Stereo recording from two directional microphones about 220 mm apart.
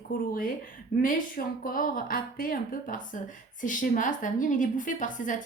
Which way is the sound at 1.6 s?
40° left (ahead or behind).